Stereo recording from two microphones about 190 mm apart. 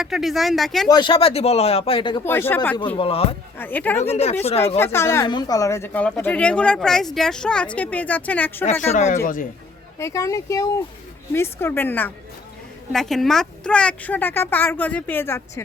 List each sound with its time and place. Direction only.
0.0 s speech: centre (ahead or behind)
0.9 s speech: 25° left (ahead or behind)
2.2 s speech: 10° left (ahead or behind)
3.0 s speech: 30° left (ahead or behind)
3.6 s speech: 10° left (ahead or behind)
4.4 s speech: 30° left (ahead or behind)
4.8 s speech: 15° left (ahead or behind)
8.9 s a man's voice: 35° left (ahead or behind)
10.0 s speech: 15° left (ahead or behind)